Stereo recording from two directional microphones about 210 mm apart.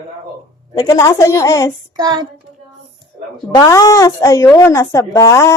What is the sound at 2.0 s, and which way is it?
Child singing, 20° right (ahead or behind).